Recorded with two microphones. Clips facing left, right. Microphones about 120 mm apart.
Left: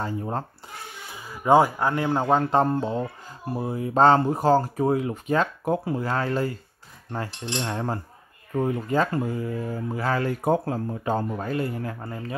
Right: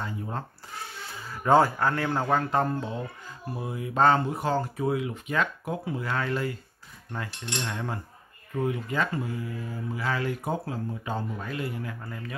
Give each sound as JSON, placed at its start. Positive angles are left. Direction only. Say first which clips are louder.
{"t": 0.0, "sound": "speech", "louder": "left 6 dB", "side_deg": 40}
{"t": 1.1, "sound": "a man's voice", "louder": "left 3 dB", "side_deg": 15}